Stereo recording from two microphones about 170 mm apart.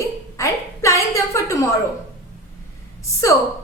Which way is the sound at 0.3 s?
15° left (ahead or behind).